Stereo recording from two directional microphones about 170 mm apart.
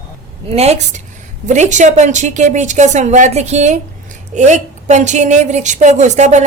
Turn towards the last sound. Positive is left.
turn(degrees=-45)  # may be behind; listen again after turning